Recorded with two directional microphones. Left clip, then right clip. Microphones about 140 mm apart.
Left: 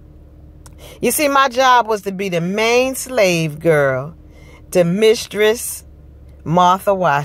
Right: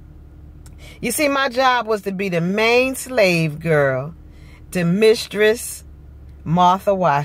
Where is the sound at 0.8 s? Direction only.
50° left (ahead or behind).